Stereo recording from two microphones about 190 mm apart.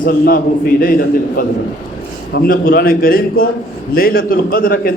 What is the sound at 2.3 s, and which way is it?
A man's voice, 50° left (ahead or behind).